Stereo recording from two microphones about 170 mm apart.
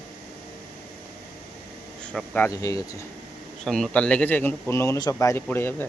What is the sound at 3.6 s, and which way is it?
A man's voice, 5° left (ahead or behind).